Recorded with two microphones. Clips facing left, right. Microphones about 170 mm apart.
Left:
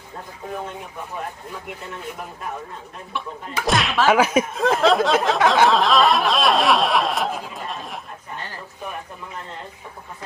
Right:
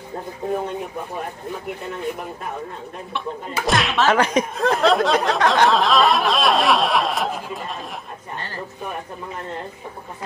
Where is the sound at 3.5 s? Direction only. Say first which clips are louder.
Even; centre (ahead or behind).